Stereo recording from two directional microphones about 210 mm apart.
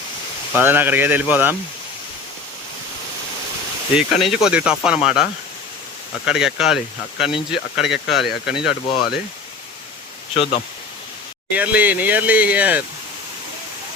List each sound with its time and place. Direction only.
0.5 s speech: 10° right (ahead or behind)
3.9 s speech: centre (ahead or behind)
6.2 s speech: 5° right (ahead or behind)
10.3 s speech: 25° left (ahead or behind)
11.5 s speech: 5° right (ahead or behind)